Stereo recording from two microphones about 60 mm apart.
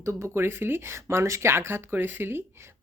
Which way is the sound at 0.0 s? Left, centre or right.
Right.